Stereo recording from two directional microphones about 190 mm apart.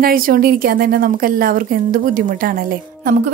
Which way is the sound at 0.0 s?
50° right (ahead or behind).